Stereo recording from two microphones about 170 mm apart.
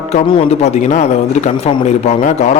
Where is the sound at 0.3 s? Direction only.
40° left (ahead or behind).